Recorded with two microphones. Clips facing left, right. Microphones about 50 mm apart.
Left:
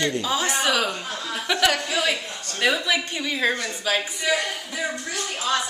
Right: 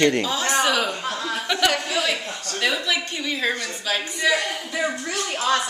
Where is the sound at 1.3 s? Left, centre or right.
Centre.